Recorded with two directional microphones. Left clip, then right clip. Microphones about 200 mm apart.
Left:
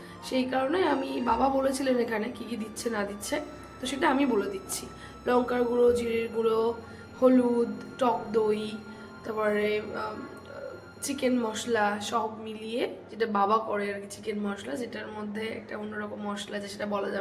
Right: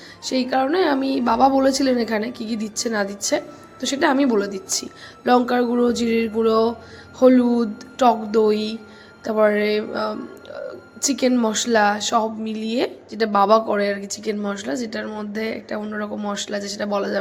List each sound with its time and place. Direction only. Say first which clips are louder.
0.3 s a woman's voice: right 8 dB; 35° right (ahead or behind)